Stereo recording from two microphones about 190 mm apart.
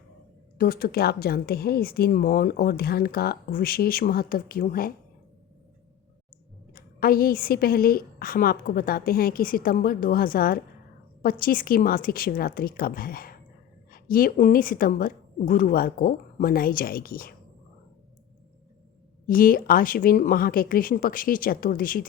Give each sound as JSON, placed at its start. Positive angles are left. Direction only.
{"t": 0.6, "sound": "a woman's voice", "side_deg": 55}
{"t": 6.7, "sound": "a woman's voice", "side_deg": 50}
{"t": 19.3, "sound": "a woman's voice", "side_deg": 50}